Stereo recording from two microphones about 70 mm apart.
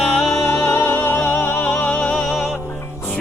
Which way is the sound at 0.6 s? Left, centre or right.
Left.